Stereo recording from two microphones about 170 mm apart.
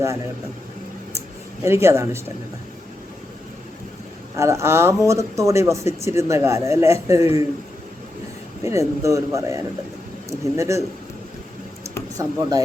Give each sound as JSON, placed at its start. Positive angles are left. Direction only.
{"t": 1.6, "sound": "speech", "side_deg": -15}
{"t": 4.4, "sound": "speech", "side_deg": -15}
{"t": 8.6, "sound": "speech", "side_deg": -20}
{"t": 12.1, "sound": "speech", "side_deg": -20}